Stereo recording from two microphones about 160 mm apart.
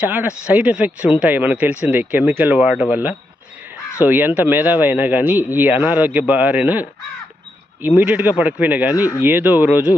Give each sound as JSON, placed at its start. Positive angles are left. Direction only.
{"t": 0.0, "sound": "speech", "side_deg": -10}